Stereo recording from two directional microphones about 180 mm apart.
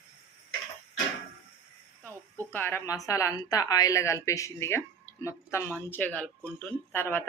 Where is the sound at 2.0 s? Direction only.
10° left (ahead or behind).